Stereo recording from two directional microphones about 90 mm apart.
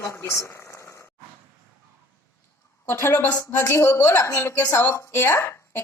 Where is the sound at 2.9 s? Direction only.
25° left (ahead or behind).